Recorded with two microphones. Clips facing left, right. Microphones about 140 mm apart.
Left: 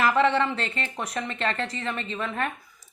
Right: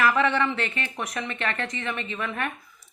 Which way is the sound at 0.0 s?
30° left (ahead or behind).